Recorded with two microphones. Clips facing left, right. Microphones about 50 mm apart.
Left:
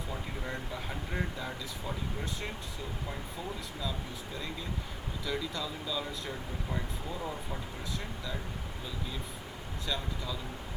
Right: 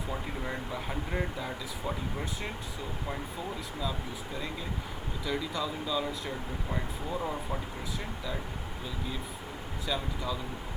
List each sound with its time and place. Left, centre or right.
0.4 s speech: centre
5.2 s speech: centre
6.7 s speech: centre
9.8 s speech: centre